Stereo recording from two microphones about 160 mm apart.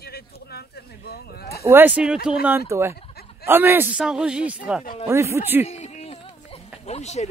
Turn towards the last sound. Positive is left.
turn(degrees=45)  # may be behind; listen again after turning